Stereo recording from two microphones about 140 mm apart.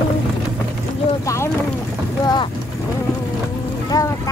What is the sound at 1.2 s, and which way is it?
Boat, 20° left (ahead or behind).